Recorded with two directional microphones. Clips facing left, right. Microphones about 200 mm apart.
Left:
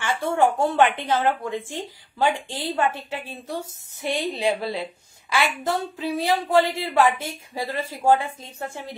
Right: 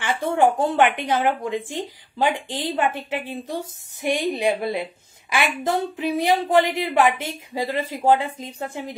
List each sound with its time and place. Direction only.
0.0 s a woman's voice: 15° right (ahead or behind)